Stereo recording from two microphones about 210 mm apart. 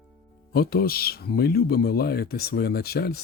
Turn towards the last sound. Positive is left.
turn(degrees=50)  # may be behind; listen again after turning